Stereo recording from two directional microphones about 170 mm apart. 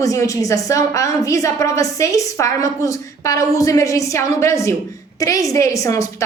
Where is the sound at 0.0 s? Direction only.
20° left (ahead or behind).